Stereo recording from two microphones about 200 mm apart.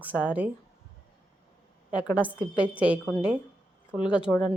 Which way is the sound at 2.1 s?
5° right (ahead or behind).